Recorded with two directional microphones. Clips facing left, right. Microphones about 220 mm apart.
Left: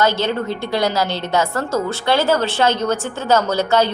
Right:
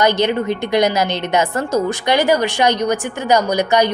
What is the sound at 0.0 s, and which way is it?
A woman's voice, 15° right (ahead or behind).